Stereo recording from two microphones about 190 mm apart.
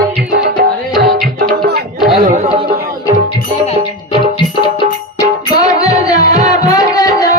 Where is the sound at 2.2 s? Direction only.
40° right (ahead or behind).